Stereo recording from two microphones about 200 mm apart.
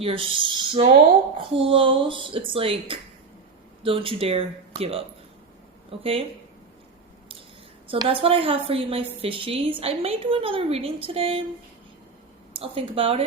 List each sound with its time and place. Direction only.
0.0 s a woman's voice: 25° right (ahead or behind)
3.8 s a woman's voice: 25° right (ahead or behind)
7.9 s a woman's voice: 25° right (ahead or behind)
12.5 s a woman's voice: 25° right (ahead or behind)